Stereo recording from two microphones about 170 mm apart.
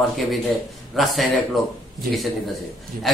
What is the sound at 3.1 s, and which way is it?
Speech, centre (ahead or behind).